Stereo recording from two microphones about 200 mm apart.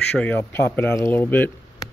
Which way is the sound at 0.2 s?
10° left (ahead or behind).